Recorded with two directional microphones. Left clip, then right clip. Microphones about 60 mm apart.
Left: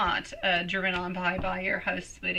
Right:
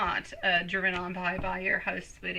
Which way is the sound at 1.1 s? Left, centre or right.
Right.